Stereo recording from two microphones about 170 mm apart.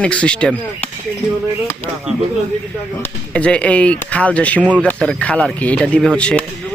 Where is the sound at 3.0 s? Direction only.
5° left (ahead or behind).